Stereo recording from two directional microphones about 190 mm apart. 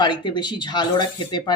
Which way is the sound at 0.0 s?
25° left (ahead or behind).